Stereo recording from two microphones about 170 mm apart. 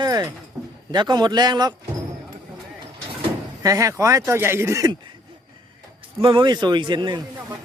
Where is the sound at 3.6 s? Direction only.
20° right (ahead or behind).